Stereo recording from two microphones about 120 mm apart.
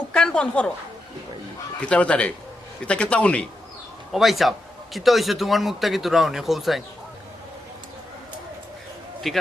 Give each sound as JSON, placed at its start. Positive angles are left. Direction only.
{"t": 0.1, "sound": "a woman's voice", "side_deg": 5}
{"t": 1.9, "sound": "a man's voice", "side_deg": 10}
{"t": 4.1, "sound": "speech", "side_deg": 0}
{"t": 9.2, "sound": "speech", "side_deg": 0}